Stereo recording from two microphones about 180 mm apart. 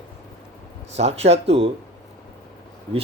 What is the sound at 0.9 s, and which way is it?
Speech, 35° right (ahead or behind).